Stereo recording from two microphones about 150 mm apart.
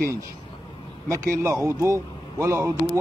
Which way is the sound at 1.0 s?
20° right (ahead or behind).